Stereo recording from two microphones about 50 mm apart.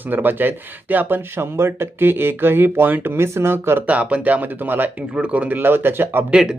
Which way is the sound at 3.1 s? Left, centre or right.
Right.